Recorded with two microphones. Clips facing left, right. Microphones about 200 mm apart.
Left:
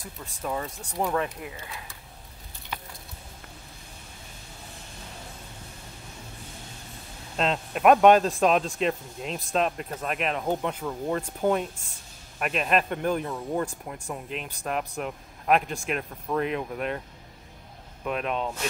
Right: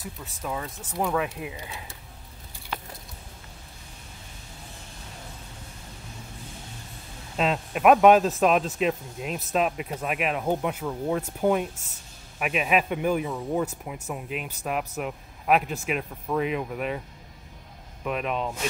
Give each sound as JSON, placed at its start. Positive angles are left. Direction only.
{"t": 0.4, "sound": "speech", "side_deg": 0}
{"t": 1.4, "sound": "speech", "side_deg": -15}
{"t": 7.3, "sound": "speech", "side_deg": -5}
{"t": 18.0, "sound": "speech", "side_deg": 0}